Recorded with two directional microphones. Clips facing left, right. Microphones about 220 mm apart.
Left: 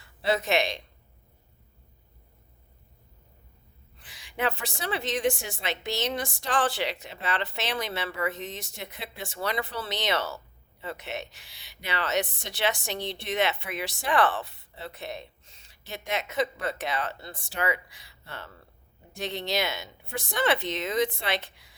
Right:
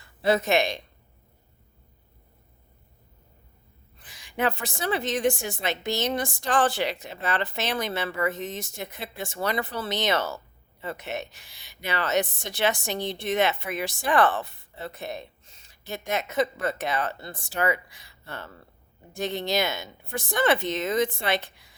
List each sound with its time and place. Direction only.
0.2 s a woman's voice: 45° right (ahead or behind)
4.0 s a woman's voice: 45° right (ahead or behind)